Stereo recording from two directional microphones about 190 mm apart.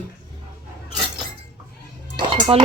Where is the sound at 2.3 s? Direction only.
40° right (ahead or behind).